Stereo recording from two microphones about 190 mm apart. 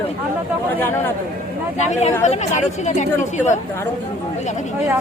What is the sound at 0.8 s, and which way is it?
Speech, 10° left (ahead or behind).